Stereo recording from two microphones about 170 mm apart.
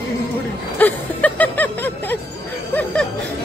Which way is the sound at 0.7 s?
10° left (ahead or behind).